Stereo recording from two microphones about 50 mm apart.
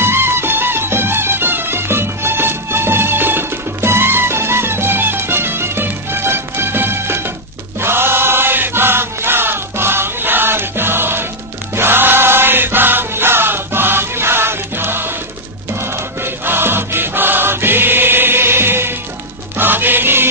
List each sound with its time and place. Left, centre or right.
0.0 s music: right
7.8 s chant: right
15.7 s music: right